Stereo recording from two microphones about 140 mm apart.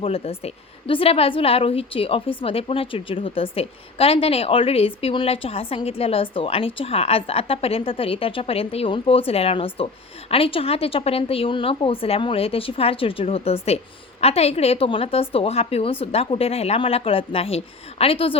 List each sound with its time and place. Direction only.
0.0 s a woman's voice: 45° left (ahead or behind)